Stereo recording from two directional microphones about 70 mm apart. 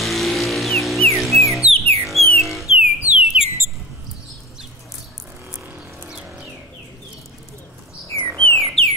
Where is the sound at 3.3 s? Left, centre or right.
Centre.